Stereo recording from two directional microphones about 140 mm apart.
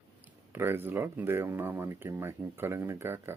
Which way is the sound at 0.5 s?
15° right (ahead or behind).